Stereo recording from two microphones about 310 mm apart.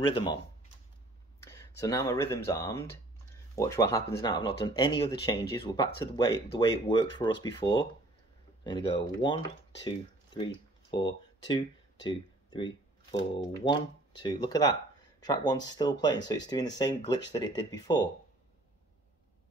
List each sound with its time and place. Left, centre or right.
0.0 s speech: centre
1.5 s speech: centre